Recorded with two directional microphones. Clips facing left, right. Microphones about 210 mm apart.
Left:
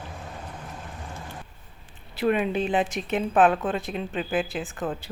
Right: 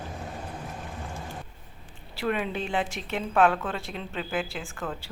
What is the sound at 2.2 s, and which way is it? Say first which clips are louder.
A woman's voice: left 5 dB; 20° left (ahead or behind).